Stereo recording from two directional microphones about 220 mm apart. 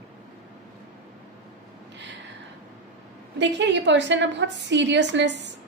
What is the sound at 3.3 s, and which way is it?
A woman's voice, 55° right (ahead or behind).